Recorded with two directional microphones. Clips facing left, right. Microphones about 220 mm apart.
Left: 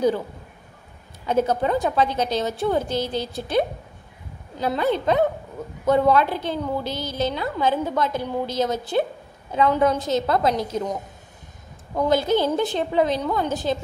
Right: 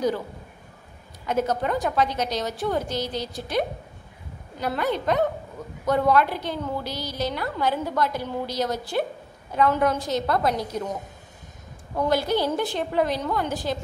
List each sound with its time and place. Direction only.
1.2 s a woman's voice: 30° left (ahead or behind)
11.9 s a woman's voice: 20° left (ahead or behind)